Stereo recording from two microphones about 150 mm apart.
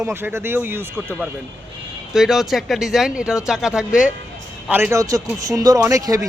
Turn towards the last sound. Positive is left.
turn(degrees=-20)  # may be behind; listen again after turning